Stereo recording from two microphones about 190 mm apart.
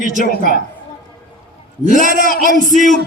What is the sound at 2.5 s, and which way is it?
Music, 40° right (ahead or behind).